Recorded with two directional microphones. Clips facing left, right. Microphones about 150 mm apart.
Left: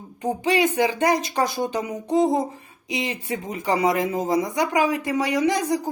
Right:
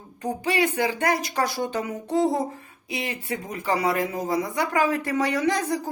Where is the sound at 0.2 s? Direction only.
20° left (ahead or behind).